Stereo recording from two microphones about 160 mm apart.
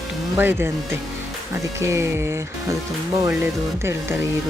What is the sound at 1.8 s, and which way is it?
Speech, 15° right (ahead or behind).